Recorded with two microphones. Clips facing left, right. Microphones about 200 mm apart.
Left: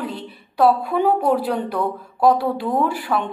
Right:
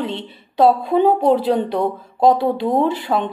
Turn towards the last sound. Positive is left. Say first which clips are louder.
# right 3 dB
turn(degrees=-20)  # may be behind; listen again after turning